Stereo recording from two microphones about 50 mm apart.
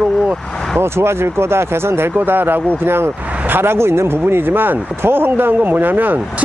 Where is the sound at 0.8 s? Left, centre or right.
Right.